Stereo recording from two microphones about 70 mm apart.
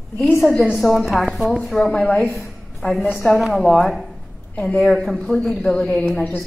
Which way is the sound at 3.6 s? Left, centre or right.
Centre.